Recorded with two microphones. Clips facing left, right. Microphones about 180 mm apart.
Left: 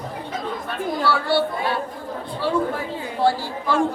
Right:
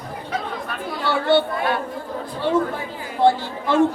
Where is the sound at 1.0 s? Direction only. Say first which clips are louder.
Right 4 dB; 20° right (ahead or behind).